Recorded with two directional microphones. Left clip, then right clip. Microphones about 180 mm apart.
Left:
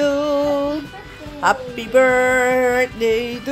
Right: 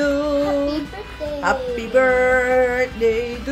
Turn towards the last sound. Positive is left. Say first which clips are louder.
# left 1 dB
turn(degrees=40)  # may be behind; listen again after turning